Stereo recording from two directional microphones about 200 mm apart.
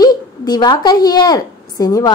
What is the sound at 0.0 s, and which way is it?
A woman's voice, 20° left (ahead or behind).